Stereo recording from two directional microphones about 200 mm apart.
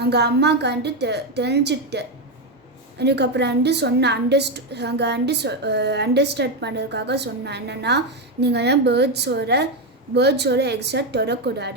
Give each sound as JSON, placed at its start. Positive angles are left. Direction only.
{"t": 0.0, "sound": "a woman's voice", "side_deg": -55}